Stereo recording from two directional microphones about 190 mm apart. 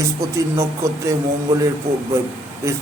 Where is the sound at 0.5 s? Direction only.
15° right (ahead or behind).